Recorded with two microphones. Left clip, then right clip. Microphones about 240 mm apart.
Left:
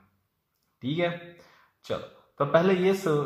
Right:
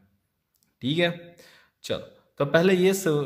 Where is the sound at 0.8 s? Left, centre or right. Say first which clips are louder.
Right 4 dB; right.